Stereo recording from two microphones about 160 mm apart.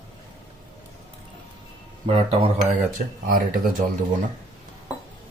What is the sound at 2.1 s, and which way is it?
Speech, 40° right (ahead or behind).